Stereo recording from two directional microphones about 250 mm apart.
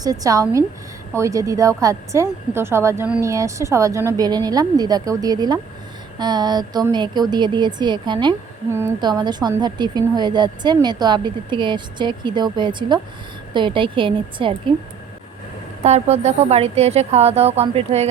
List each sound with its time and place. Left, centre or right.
0.0 s a woman's voice: centre
15.8 s speech: right